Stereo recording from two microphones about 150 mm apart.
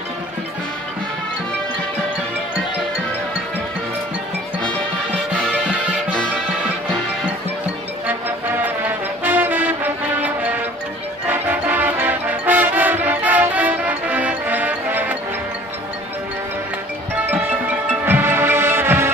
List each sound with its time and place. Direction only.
5.5 s music: 10° right (ahead or behind)
8.1 s music: 10° right (ahead or behind)
17.3 s music: 10° right (ahead or behind)